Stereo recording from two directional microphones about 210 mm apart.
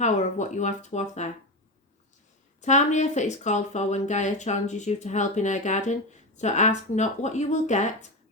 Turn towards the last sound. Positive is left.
turn(degrees=35)  # may be behind; listen again after turning